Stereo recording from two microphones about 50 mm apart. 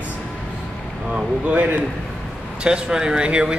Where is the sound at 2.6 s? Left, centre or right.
Centre.